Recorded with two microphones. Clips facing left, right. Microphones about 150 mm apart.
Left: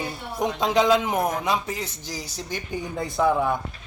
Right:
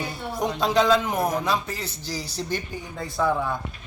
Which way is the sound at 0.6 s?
15° left (ahead or behind).